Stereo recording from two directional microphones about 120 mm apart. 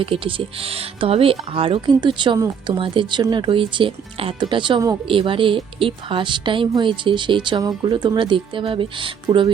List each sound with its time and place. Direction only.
0.0 s speech: 45° right (ahead or behind)